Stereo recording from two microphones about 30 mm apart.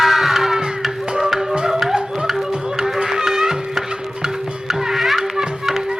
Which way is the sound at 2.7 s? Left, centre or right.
Centre.